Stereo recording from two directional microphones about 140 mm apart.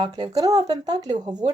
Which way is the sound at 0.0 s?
30° right (ahead or behind).